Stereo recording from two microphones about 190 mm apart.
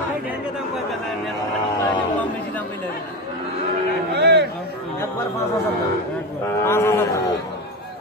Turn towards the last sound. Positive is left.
turn(degrees=15)  # may be behind; listen again after turning